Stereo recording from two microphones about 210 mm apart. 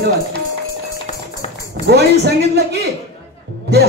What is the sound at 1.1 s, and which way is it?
Music, 30° left (ahead or behind).